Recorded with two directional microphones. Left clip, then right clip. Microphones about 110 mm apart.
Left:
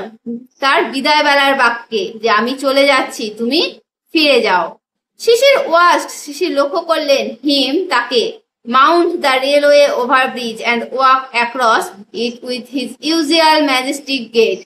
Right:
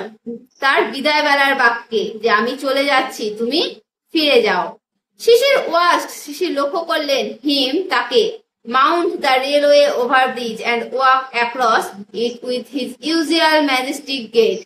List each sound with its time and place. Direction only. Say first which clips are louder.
0.6 s a woman's voice: left 2 dB; 40° left (ahead or behind)
8.6 s a woman's voice: left 4 dB; 50° left (ahead or behind)